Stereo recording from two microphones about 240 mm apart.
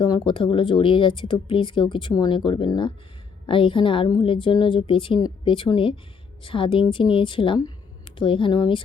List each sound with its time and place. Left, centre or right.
0.0 s speech: centre